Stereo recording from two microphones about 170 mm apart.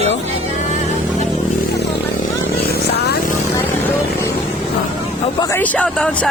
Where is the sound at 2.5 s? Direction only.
70° left (ahead or behind).